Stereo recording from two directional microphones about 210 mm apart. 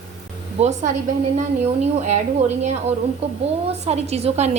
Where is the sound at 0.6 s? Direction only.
35° right (ahead or behind).